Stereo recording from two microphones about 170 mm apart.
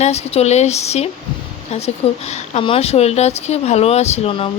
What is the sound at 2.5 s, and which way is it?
Speech, 35° left (ahead or behind).